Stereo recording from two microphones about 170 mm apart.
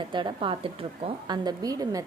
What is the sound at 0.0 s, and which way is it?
A woman's voice, 30° right (ahead or behind).